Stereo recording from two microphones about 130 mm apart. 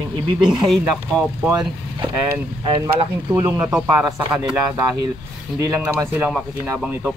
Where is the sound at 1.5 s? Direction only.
35° right (ahead or behind).